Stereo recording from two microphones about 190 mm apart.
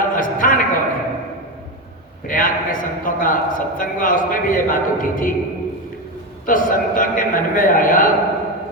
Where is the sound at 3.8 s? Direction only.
45° left (ahead or behind).